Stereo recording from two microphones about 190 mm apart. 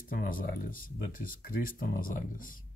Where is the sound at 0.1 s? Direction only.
45° left (ahead or behind).